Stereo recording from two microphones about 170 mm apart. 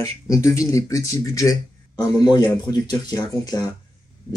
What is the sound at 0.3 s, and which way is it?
Speech, 20° left (ahead or behind).